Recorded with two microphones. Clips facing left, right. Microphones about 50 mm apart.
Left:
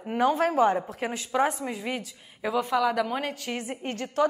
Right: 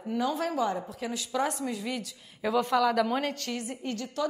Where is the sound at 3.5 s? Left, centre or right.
Left.